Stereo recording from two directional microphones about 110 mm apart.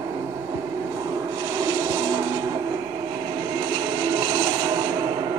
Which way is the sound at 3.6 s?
35° right (ahead or behind).